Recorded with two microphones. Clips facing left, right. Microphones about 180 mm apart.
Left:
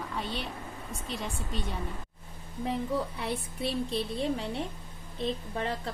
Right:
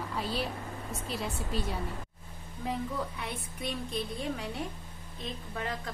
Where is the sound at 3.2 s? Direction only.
30° left (ahead or behind).